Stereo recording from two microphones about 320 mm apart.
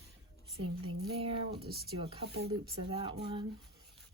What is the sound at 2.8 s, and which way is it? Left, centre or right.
Speech, centre.